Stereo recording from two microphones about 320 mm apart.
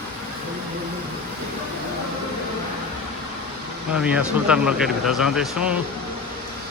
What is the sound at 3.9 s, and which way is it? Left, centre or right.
Speech, centre.